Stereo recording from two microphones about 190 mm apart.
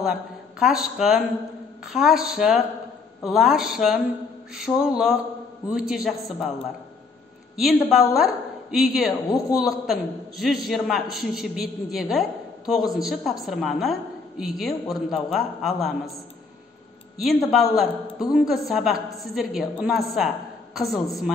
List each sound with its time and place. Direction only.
0.0 s a man's voice: centre (ahead or behind)
17.5 s a man's voice: centre (ahead or behind)